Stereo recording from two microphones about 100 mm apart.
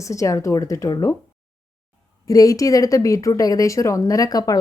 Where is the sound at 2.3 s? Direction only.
35° left (ahead or behind).